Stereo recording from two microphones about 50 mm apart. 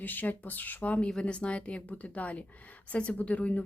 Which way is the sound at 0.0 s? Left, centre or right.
Left.